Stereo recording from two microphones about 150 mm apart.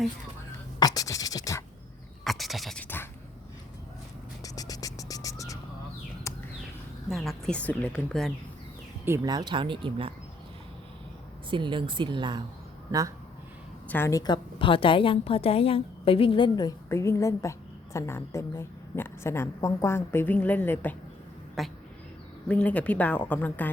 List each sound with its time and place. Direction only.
0.8 s beatboxing: 25° left (ahead or behind)
2.2 s a sound: centre (ahead or behind)
2.8 s a sound: 15° left (ahead or behind)
4.4 s a sound: 25° left (ahead or behind)
7.1 s speech: centre (ahead or behind)
9.0 s speech: 20° right (ahead or behind)
11.5 s speech: 35° right (ahead or behind)
13.8 s a woman's voice: 15° left (ahead or behind)
21.6 s a woman's voice: centre (ahead or behind)